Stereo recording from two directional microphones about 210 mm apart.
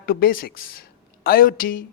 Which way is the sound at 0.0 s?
45° left (ahead or behind).